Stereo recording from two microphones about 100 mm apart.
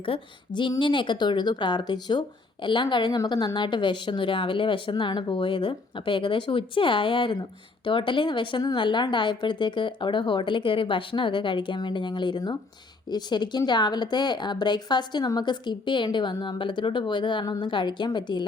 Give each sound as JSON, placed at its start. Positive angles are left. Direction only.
{"t": 0.0, "sound": "a woman's voice", "side_deg": 60}